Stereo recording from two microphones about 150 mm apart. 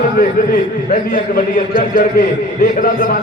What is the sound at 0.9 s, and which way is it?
A man's voice, 70° left (ahead or behind).